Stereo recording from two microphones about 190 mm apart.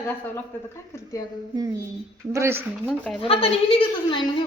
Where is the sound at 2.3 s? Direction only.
15° right (ahead or behind).